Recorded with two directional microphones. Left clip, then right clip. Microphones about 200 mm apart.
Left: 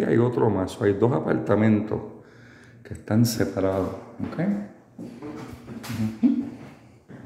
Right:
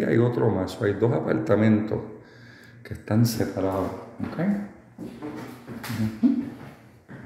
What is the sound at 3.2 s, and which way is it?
Speech, 20° left (ahead or behind).